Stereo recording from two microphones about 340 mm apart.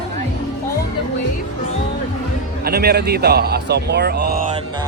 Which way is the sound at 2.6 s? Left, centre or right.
Right.